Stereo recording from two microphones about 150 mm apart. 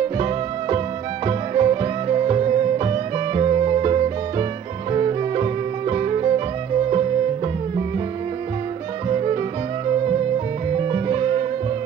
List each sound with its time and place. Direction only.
1.2 s music: 35° right (ahead or behind)
9.1 s music: 35° right (ahead or behind)
10.7 s music: 35° right (ahead or behind)